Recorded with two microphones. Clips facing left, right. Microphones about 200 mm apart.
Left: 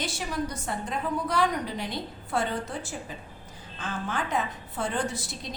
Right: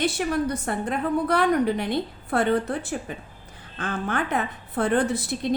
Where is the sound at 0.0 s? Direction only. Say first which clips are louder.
Right 7 dB; 60° right (ahead or behind).